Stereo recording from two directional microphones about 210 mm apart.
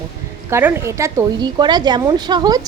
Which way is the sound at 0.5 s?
10° right (ahead or behind).